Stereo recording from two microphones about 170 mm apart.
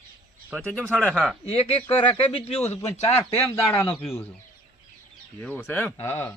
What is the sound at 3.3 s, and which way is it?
Speech, 10° left (ahead or behind).